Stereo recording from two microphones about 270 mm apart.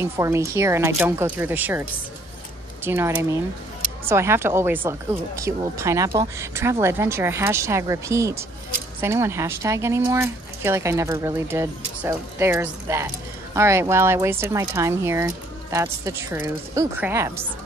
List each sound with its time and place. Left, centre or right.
0.0 s speech: centre